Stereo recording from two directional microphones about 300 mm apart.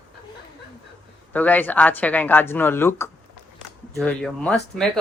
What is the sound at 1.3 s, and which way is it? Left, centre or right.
Speech, centre.